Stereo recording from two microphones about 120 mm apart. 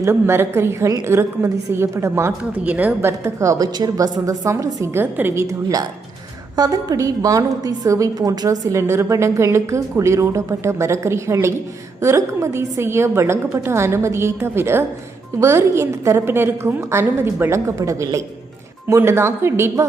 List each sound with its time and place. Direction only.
0.0 s a woman's voice: 20° right (ahead or behind)
3.1 s a woman's voice: 25° right (ahead or behind)